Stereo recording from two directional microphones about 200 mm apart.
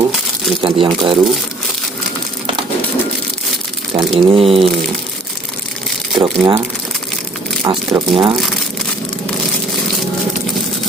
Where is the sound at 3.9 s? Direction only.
30° right (ahead or behind).